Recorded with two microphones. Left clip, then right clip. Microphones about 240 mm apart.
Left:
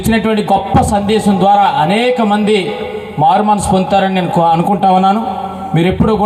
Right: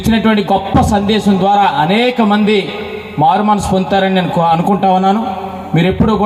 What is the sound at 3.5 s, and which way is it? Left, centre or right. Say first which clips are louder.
Speech: left 1 dB; left.